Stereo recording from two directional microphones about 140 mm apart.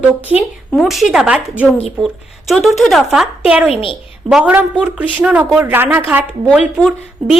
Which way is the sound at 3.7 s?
40° left (ahead or behind).